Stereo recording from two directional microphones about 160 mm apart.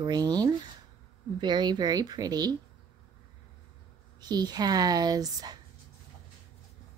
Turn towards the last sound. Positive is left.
turn(degrees=-25)  # may be behind; listen again after turning